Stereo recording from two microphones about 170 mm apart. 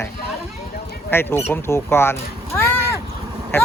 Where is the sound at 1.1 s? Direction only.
15° left (ahead or behind).